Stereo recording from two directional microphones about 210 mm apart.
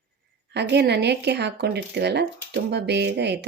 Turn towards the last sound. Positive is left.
turn(degrees=-55)  # may be behind; listen again after turning